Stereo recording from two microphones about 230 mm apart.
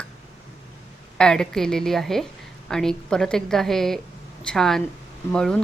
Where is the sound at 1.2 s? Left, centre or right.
Centre.